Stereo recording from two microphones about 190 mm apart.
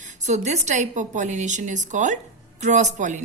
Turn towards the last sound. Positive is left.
turn(degrees=-40)  # may be behind; listen again after turning